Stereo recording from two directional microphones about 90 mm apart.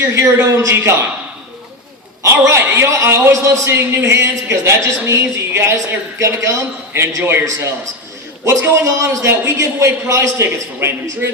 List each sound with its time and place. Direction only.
0.0 s a man's voice: 30° right (ahead or behind)
2.4 s a man's voice: 30° right (ahead or behind)
7.2 s a man's voice: 20° right (ahead or behind)
8.6 s a man's voice: 35° right (ahead or behind)